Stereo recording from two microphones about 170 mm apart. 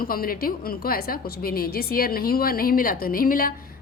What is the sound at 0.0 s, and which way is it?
A woman's voice, 60° left (ahead or behind).